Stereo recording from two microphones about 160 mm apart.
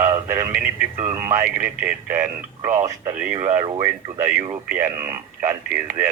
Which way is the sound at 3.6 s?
25° right (ahead or behind).